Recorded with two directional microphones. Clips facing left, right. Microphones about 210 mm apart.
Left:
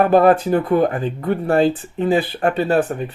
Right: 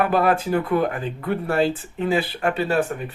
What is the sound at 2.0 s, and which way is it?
Speech, 35° left (ahead or behind).